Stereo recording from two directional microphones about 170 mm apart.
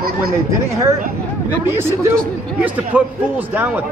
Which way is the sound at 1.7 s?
15° right (ahead or behind).